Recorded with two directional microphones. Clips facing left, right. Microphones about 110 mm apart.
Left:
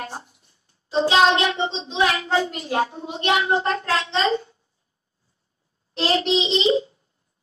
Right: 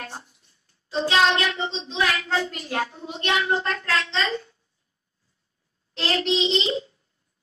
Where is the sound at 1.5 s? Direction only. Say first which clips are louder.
Left 4 dB; 15° left (ahead or behind).